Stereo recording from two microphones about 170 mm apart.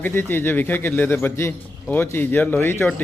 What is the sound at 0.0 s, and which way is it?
A man's voice, 10° left (ahead or behind).